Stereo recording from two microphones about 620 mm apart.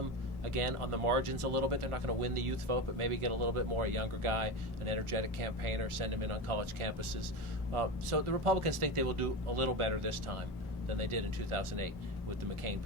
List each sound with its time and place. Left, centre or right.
0.4 s speech: right
8.1 s speech: right